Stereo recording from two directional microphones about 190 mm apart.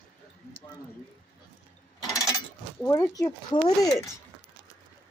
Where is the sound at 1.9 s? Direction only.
15° left (ahead or behind).